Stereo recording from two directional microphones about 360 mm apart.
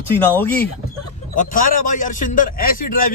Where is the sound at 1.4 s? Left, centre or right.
Left.